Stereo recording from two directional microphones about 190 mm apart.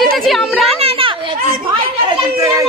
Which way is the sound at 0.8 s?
30° right (ahead or behind).